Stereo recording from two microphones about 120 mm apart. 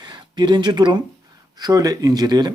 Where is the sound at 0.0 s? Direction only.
40° right (ahead or behind).